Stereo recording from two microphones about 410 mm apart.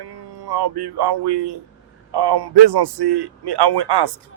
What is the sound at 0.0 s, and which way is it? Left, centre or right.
A man's voice, right.